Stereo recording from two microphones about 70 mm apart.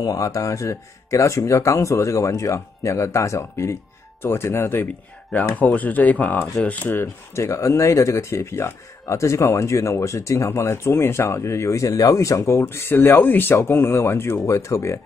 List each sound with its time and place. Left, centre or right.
0.0 s speech: left
5.6 s speech: left
7.3 s speech: left
14.4 s speech: left